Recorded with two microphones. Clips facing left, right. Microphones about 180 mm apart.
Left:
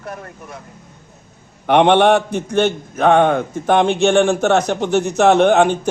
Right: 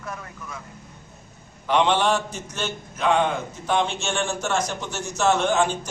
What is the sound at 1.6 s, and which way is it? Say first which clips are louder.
A man's voice: left 9 dB; 60° left (ahead or behind).